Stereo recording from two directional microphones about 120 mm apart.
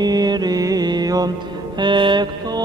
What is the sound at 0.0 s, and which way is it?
Mantra, 35° right (ahead or behind).